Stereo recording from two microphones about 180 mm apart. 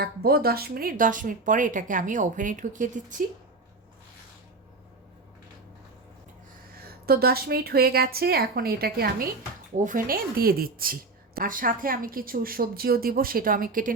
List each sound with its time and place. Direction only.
0.0 s a woman's voice: 60° right (ahead or behind)
6.7 s a woman's voice: 55° right (ahead or behind)
9.7 s a woman's voice: 45° right (ahead or behind)